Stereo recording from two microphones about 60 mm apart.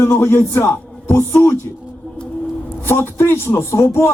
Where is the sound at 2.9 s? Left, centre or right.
Left.